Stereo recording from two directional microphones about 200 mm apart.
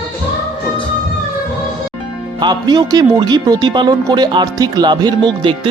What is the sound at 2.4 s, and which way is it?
Speech, 20° right (ahead or behind).